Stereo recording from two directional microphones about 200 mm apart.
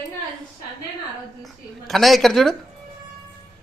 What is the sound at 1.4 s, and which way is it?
Speech, centre (ahead or behind).